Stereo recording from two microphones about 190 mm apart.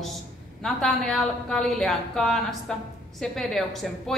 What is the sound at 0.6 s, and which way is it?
A woman's voice, 5° left (ahead or behind).